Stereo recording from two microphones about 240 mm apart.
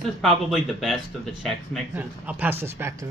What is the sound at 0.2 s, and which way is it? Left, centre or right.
Speech, centre.